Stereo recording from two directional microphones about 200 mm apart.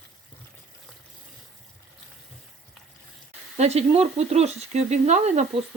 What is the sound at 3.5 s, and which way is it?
Speech, 35° right (ahead or behind).